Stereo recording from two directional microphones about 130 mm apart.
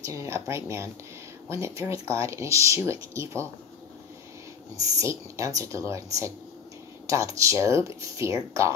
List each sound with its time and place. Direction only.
0.0 s speech: 20° right (ahead or behind)
4.7 s speech: 25° right (ahead or behind)